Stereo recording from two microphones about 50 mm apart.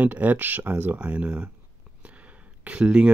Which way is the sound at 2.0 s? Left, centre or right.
Right.